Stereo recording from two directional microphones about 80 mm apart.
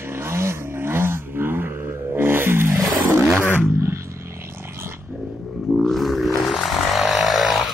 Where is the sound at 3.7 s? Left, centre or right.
Right.